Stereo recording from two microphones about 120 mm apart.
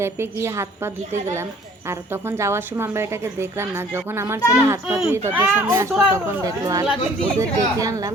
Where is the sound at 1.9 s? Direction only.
20° right (ahead or behind).